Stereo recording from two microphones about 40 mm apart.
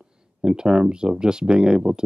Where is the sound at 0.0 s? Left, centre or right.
Centre.